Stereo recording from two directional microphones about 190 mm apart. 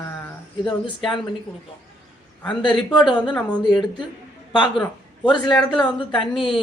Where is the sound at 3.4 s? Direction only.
5° left (ahead or behind).